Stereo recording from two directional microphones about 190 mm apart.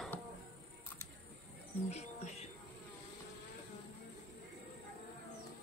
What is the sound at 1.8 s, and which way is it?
Music, 35° left (ahead or behind).